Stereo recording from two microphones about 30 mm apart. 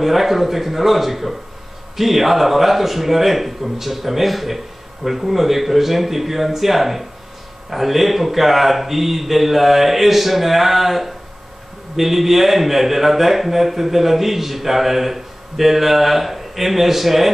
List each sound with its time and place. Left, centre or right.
0.0 s a man's voice: centre